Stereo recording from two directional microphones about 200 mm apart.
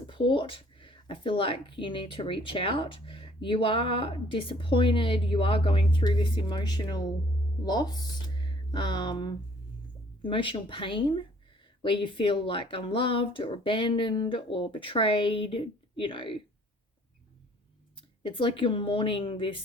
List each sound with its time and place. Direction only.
0.1 s speech: 25° left (ahead or behind)
18.2 s speech: 25° left (ahead or behind)